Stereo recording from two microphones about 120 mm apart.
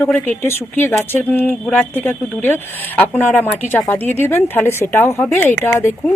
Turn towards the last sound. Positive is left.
turn(degrees=20)  # may be behind; listen again after turning